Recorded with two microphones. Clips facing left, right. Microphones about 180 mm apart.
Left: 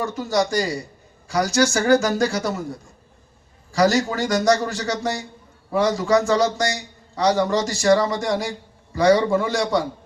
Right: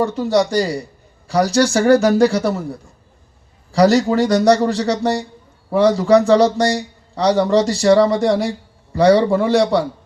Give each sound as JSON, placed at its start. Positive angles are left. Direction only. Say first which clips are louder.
{"t": 0.0, "sound": "a man's voice", "louder": "right 6 dB", "side_deg": -30}
{"t": 3.9, "sound": "a man's voice", "louder": "right 7 dB", "side_deg": -35}